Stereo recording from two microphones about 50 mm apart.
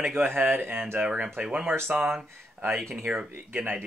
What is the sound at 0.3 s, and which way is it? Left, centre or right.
Speech, right.